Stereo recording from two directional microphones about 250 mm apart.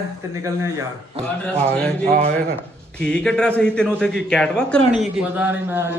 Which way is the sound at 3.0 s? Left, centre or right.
Centre.